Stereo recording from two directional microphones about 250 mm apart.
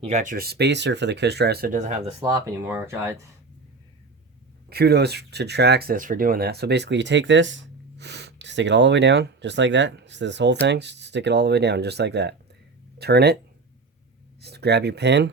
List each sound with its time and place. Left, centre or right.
0.0 s speech: right
2.2 s speech: centre
4.7 s speech: right
14.4 s speech: right